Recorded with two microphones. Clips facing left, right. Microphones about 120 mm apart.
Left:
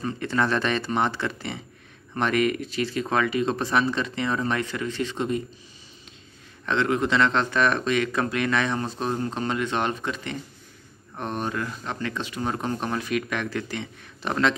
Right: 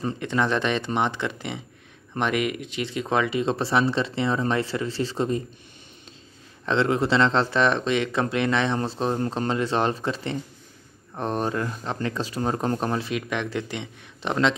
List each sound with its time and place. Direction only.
0.2 s speech: 15° right (ahead or behind); by 5.4 s 35° right (ahead or behind)
6.6 s speech: 30° right (ahead or behind)
12.9 s speech: 25° right (ahead or behind)